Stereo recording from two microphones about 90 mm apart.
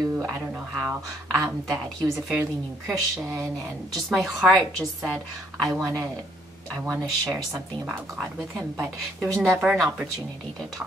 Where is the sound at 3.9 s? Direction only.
Centre (ahead or behind).